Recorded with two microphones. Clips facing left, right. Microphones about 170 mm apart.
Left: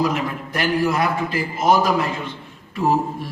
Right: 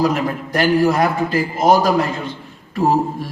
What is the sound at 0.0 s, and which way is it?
A man's voice, 40° right (ahead or behind).